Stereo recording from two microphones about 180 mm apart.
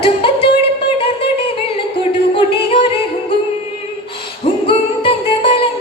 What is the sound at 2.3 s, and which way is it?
Music, 30° left (ahead or behind).